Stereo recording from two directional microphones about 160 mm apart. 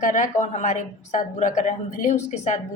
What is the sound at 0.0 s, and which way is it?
A woman's voice, 50° left (ahead or behind).